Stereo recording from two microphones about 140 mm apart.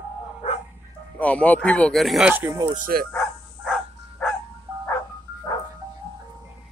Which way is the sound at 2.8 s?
90° right.